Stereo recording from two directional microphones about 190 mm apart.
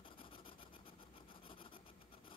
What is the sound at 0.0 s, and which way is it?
Rub, 25° left (ahead or behind).